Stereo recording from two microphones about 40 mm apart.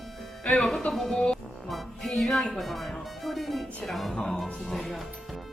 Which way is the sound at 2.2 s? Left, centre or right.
Centre.